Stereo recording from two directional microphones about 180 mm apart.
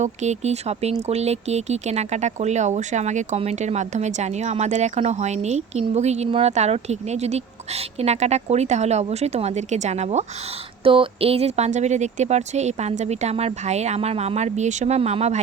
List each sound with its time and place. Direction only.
0.0 s speech: 40° right (ahead or behind)